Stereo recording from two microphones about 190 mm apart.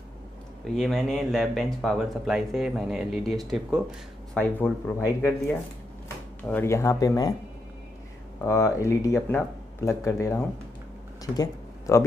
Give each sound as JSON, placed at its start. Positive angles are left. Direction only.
{"t": 0.7, "sound": "speech", "side_deg": 0}
{"t": 8.5, "sound": "speech", "side_deg": 15}